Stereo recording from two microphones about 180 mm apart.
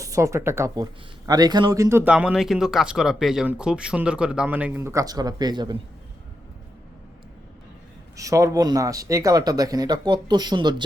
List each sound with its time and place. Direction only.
0.0 s a man's voice: 15° right (ahead or behind)
8.1 s speech: 20° right (ahead or behind)